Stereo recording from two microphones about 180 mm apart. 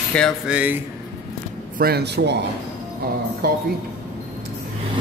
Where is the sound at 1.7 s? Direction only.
60° right (ahead or behind).